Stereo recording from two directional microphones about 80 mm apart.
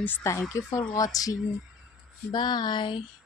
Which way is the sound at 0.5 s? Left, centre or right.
Left.